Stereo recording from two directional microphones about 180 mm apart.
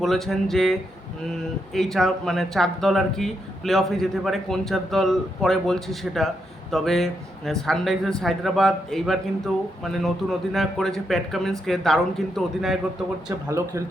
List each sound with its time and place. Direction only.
0.0 s speech: centre (ahead or behind)
13.2 s speech: 15° right (ahead or behind)